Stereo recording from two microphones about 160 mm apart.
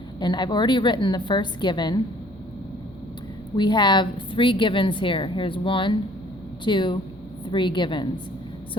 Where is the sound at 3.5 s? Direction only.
30° left (ahead or behind).